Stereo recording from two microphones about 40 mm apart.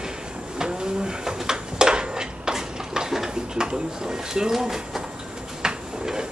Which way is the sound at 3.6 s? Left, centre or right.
Centre.